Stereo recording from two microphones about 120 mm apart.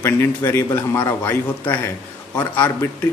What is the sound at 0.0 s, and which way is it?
A man's voice, 20° left (ahead or behind).